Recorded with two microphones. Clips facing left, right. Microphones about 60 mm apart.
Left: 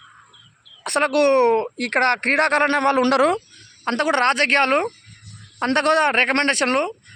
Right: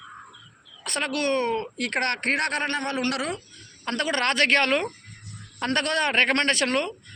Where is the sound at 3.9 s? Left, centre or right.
Left.